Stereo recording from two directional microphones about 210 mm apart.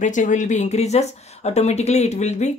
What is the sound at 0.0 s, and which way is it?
A woman's voice, 35° left (ahead or behind).